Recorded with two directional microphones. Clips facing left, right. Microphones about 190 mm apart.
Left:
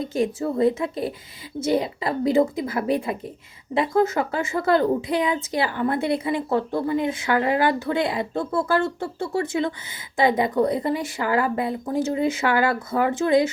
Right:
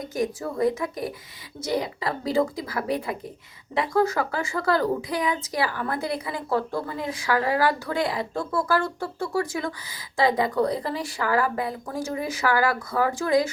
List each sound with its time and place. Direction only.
0.0 s a woman's voice: 25° left (ahead or behind)